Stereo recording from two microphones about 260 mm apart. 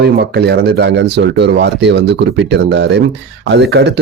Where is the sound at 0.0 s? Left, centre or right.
Right.